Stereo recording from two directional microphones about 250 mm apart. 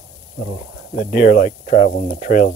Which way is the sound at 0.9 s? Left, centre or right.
Left.